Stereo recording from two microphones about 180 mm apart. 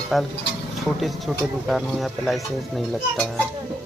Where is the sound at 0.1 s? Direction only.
Centre (ahead or behind).